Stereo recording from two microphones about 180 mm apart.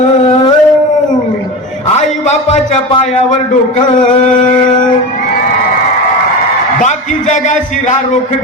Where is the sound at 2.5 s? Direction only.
35° left (ahead or behind).